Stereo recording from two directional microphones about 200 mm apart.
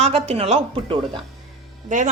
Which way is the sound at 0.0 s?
30° right (ahead or behind).